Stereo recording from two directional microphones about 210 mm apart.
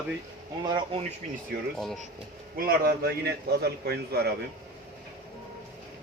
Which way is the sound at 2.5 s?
45° right (ahead or behind).